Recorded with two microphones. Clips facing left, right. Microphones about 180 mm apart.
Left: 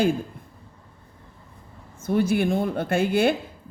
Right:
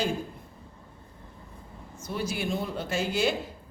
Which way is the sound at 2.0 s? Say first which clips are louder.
Left 10 dB; 55° left (ahead or behind).